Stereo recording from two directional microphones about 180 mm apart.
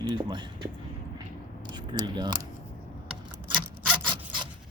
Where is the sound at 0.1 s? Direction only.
25° right (ahead or behind).